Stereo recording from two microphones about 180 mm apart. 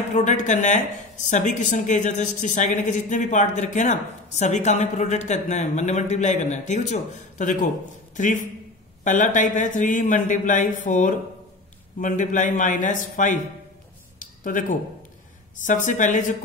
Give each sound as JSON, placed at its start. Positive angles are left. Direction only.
{"t": 0.1, "sound": "a woman's voice", "side_deg": 40}
{"t": 14.2, "sound": "a sound", "side_deg": 45}
{"t": 15.5, "sound": "speech", "side_deg": 45}